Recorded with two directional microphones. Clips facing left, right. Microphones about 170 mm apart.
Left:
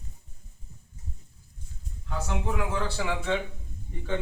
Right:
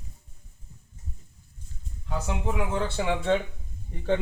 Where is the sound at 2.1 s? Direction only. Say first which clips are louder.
Right 1 dB; 20° right (ahead or behind).